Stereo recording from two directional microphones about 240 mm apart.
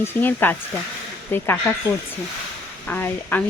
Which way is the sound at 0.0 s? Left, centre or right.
Centre.